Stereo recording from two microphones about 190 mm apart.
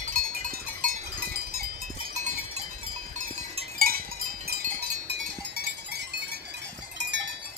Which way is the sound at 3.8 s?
50° right (ahead or behind).